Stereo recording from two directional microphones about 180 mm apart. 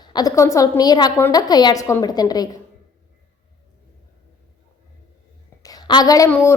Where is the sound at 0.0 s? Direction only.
20° left (ahead or behind).